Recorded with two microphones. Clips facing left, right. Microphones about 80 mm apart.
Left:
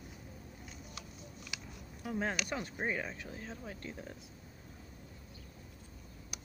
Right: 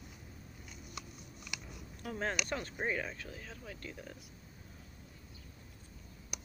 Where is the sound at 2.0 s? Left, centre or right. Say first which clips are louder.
Left 1 dB; centre; by 4.1 s left.